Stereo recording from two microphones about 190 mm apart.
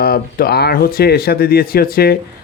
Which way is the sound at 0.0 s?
55° left (ahead or behind).